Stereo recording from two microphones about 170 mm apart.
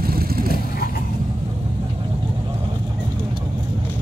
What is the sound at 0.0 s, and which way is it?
Vehicle, 60° right (ahead or behind).